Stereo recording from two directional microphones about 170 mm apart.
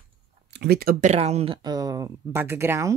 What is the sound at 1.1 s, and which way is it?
Speech, 40° right (ahead or behind).